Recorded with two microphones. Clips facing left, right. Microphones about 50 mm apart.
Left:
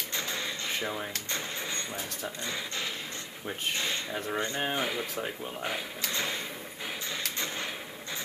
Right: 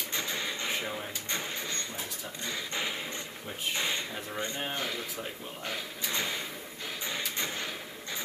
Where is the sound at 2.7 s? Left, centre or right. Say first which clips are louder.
Right 2 dB; centre.